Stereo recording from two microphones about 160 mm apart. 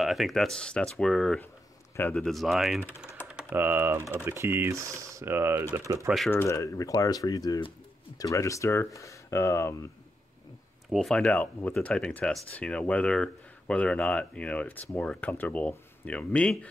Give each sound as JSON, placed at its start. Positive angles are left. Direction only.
{"t": 0.0, "sound": "speech", "side_deg": 0}
{"t": 6.0, "sound": "speech", "side_deg": 0}
{"t": 6.3, "sound": "speech", "side_deg": 15}
{"t": 10.9, "sound": "speech", "side_deg": 0}